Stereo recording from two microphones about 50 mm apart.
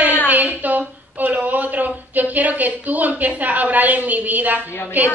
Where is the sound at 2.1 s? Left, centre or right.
Right.